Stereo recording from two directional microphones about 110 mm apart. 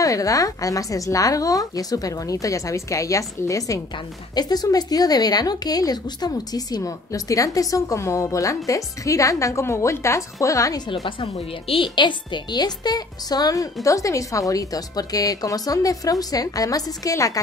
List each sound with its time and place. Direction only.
0.0 s speech: 30° left (ahead or behind)
11.1 s a woman's voice: 55° left (ahead or behind); by 17.4 s 30° left (ahead or behind)